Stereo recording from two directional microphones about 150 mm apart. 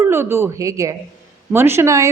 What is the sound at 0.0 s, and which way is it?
A woman's voice, 15° right (ahead or behind).